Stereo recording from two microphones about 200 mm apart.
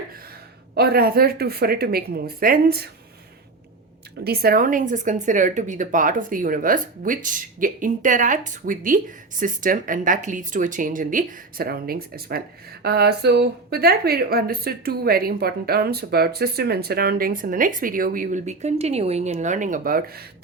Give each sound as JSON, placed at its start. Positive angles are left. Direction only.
{"t": 0.7, "sound": "a woman's voice", "side_deg": -50}
{"t": 4.2, "sound": "a woman's voice", "side_deg": -50}